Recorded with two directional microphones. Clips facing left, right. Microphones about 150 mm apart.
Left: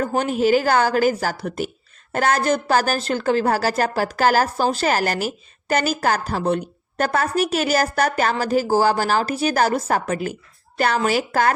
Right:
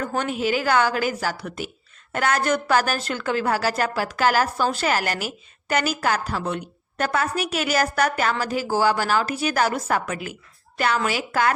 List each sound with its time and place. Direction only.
0.2 s a woman's voice: 40° left (ahead or behind)